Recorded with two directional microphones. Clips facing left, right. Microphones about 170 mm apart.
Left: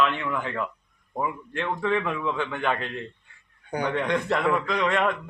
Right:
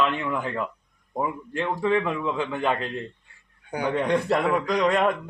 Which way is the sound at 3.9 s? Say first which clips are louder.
Right 4 dB; 35° right (ahead or behind).